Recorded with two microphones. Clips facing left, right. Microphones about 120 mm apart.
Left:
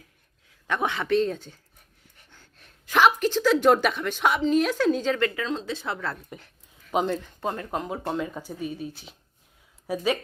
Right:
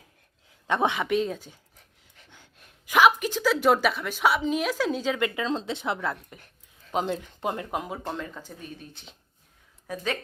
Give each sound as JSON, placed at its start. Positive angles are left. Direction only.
{"t": 0.7, "sound": "a woman's voice", "side_deg": -20}
{"t": 5.4, "sound": "speech", "side_deg": -25}
{"t": 6.9, "sound": "speech", "side_deg": 0}
{"t": 7.2, "sound": "speech", "side_deg": -15}
{"t": 7.9, "sound": "speech", "side_deg": 5}